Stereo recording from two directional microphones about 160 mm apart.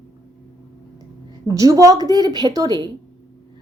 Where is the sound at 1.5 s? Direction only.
20° right (ahead or behind).